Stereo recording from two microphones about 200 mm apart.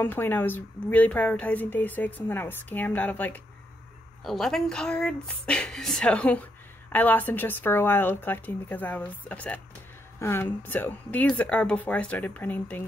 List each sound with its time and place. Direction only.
0.0 s speech: 10° left (ahead or behind)